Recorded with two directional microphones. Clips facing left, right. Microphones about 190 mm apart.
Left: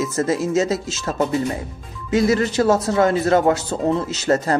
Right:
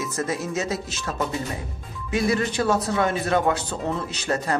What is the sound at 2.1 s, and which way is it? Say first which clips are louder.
Speech: left 5 dB; 25° left (ahead or behind).